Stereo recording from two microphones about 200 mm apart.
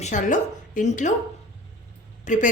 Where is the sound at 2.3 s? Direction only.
40° left (ahead or behind).